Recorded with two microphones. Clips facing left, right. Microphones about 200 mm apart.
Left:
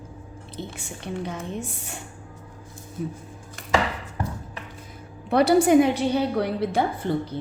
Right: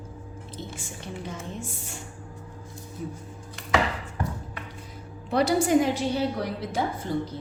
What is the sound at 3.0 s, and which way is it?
Speech, 60° left (ahead or behind).